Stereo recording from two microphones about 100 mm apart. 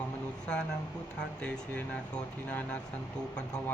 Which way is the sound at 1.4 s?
10° left (ahead or behind).